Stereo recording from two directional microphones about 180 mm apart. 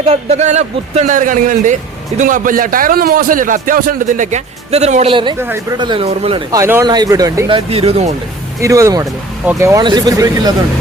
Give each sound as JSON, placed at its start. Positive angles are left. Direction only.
{"t": 0.0, "sound": "a man's voice", "side_deg": -35}
{"t": 5.7, "sound": "speech", "side_deg": -25}
{"t": 6.5, "sound": "speech", "side_deg": -15}
{"t": 8.6, "sound": "speech", "side_deg": -15}